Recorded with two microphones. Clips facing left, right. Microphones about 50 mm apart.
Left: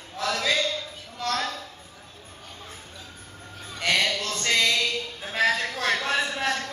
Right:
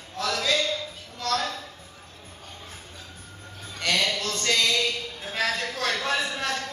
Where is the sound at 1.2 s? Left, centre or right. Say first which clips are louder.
Right 1 dB; centre.